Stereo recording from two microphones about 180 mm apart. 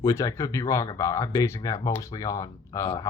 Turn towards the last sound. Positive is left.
turn(degrees=15)  # may be behind; listen again after turning